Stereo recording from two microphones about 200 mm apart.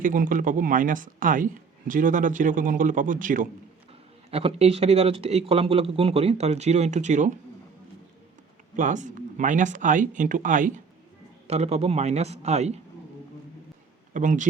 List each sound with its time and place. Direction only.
0.0 s speech: 40° right (ahead or behind)
4.3 s speech: 30° right (ahead or behind)
8.7 s speech: 40° right (ahead or behind)
14.1 s speech: 40° right (ahead or behind)